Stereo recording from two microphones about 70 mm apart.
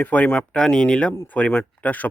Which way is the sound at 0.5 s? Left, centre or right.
Centre.